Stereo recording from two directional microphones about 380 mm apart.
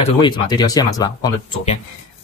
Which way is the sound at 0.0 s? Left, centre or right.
Centre.